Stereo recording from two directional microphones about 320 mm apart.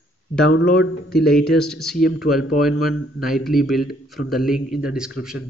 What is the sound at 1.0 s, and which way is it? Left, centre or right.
Speech, centre.